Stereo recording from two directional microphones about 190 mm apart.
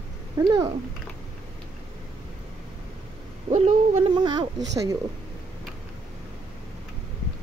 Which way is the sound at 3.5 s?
35° right (ahead or behind).